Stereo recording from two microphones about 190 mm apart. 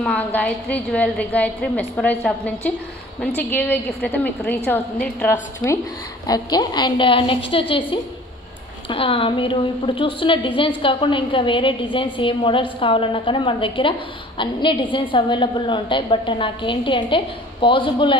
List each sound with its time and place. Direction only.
0.0 s a woman's voice: 10° left (ahead or behind); by 18.1 s 25° left (ahead or behind)